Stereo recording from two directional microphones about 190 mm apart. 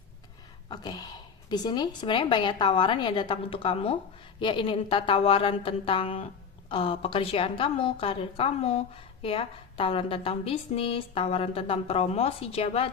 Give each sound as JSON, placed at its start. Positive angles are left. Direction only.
{"t": 0.7, "sound": "a woman's voice", "side_deg": 20}